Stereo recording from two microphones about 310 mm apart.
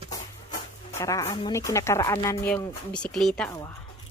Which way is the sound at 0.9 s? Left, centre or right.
Centre.